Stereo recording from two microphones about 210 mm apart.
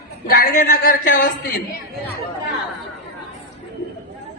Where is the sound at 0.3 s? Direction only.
45° left (ahead or behind).